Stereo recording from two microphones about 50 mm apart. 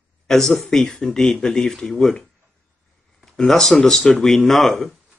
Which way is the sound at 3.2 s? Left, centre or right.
Centre.